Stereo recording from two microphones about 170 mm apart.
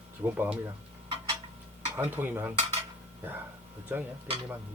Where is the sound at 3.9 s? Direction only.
10° right (ahead or behind).